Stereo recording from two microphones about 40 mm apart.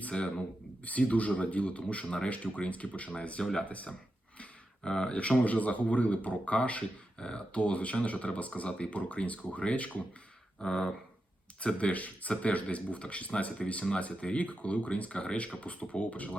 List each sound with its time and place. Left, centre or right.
0.1 s speech: left
0.9 s speech: left
2.3 s speech: left
4.8 s speech: centre
5.4 s speech: left
10.6 s speech: centre
11.6 s speech: left